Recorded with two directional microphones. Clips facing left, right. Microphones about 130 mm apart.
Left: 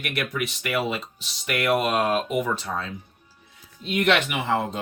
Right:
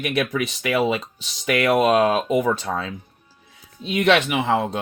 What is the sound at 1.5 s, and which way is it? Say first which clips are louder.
Speech: right 5 dB; 90° right.